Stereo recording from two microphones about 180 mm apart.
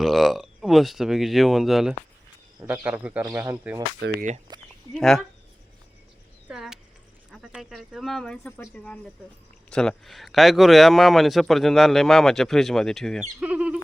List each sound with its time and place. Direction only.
0.0 s a man's voice: centre (ahead or behind)
4.0 s speech: 75° right (ahead or behind)
4.5 s a sound: 25° right (ahead or behind)
4.9 s speech: centre (ahead or behind)
6.5 s a sound: 5° right (ahead or behind)
7.3 s speech: 5° right (ahead or behind)
13.4 s chicken: 5° right (ahead or behind)